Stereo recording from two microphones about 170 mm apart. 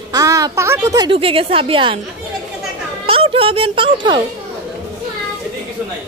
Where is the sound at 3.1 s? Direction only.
35° right (ahead or behind).